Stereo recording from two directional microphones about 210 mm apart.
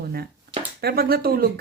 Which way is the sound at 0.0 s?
45° right (ahead or behind).